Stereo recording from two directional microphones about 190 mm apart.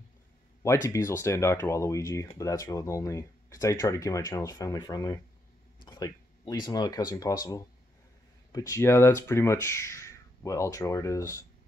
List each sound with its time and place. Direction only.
0.8 s speech: 15° left (ahead or behind)